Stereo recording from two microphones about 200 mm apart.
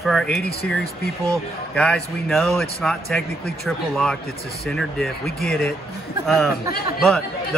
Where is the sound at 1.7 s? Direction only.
5° left (ahead or behind).